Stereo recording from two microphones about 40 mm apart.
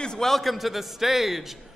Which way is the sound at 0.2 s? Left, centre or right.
Centre.